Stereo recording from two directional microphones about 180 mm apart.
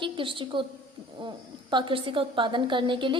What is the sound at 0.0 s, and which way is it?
Speech, 30° right (ahead or behind).